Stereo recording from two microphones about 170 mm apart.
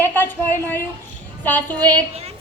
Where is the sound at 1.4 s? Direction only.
10° left (ahead or behind).